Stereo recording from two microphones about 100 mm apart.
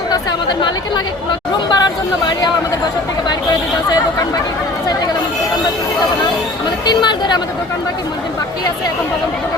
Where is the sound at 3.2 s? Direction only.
45° left (ahead or behind).